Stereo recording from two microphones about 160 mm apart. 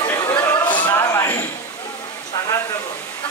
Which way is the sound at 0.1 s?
20° left (ahead or behind).